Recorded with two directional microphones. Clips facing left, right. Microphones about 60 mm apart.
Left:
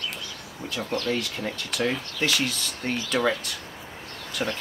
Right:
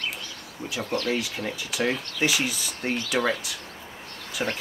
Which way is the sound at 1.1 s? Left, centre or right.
Centre.